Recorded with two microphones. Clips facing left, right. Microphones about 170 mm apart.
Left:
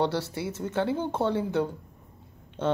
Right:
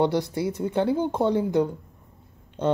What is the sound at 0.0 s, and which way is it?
Speech, 15° right (ahead or behind).